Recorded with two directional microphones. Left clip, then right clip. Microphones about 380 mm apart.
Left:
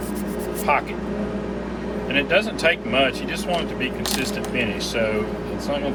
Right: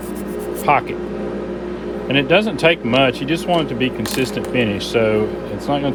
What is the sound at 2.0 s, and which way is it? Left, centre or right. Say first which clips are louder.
Speech: right 5 dB; right.